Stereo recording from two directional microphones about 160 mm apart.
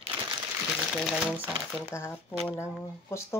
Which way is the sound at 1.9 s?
15° left (ahead or behind).